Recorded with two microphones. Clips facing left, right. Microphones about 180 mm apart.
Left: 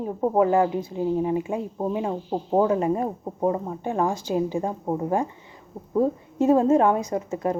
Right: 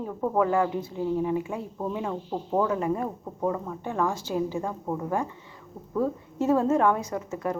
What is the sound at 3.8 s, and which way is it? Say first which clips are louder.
A woman's voice: left 3 dB; 20° left (ahead or behind).